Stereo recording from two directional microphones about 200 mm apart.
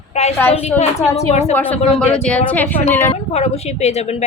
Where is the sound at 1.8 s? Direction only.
30° left (ahead or behind).